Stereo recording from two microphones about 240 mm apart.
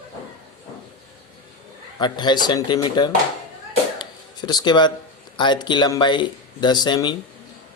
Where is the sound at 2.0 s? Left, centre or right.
Centre.